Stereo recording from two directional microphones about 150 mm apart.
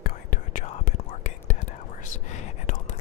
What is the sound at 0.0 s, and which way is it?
Whispering, 60° left (ahead or behind).